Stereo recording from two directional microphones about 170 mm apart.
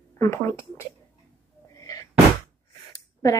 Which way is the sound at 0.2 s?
15° left (ahead or behind).